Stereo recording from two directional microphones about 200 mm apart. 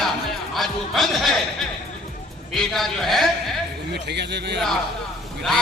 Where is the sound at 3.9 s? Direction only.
55° right (ahead or behind).